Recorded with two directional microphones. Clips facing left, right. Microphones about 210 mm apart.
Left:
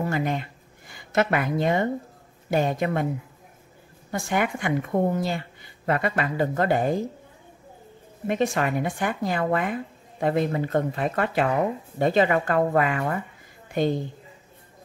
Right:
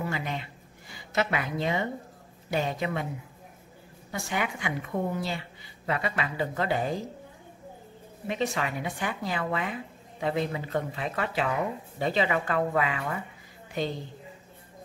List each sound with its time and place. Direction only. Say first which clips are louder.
0.0 s a woman's voice: left 7 dB; 50° left (ahead or behind)
4.1 s a woman's voice: left 6 dB; 50° left (ahead or behind)
8.3 s a woman's voice: left 6 dB; 50° left (ahead or behind)